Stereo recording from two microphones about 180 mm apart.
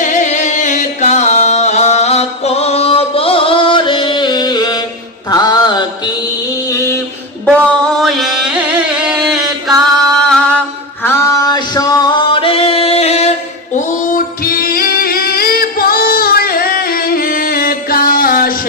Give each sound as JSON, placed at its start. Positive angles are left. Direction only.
{"t": 0.0, "sound": "music", "side_deg": 45}
{"t": 7.4, "sound": "carnatic music", "side_deg": 0}
{"t": 10.1, "sound": "a sound", "side_deg": 5}
{"t": 11.0, "sound": "music", "side_deg": 15}
{"t": 13.7, "sound": "female singing", "side_deg": 50}